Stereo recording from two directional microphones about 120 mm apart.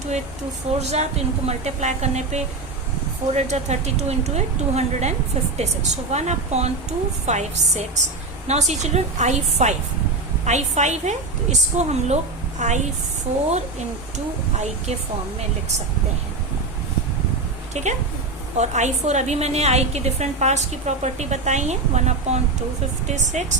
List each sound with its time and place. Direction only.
0.8 s a woman's voice: 65° right (ahead or behind)
14.5 s a woman's voice: 70° right (ahead or behind)
17.7 s a woman's voice: 70° right (ahead or behind)